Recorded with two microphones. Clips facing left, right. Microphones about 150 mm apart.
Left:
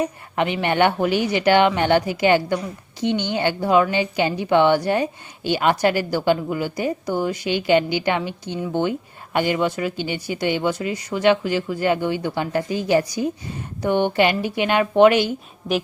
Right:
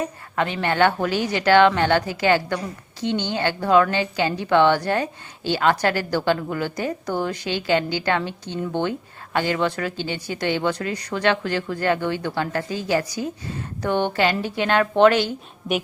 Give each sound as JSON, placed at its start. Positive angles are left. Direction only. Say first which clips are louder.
{"t": 0.0, "sound": "a woman's voice", "louder": "left 2 dB", "side_deg": 15}